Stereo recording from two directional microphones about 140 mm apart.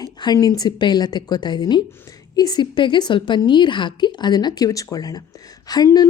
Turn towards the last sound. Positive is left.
turn(degrees=30)  # may be behind; listen again after turning